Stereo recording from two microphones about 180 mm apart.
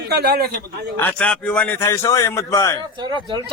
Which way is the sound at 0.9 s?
10° left (ahead or behind).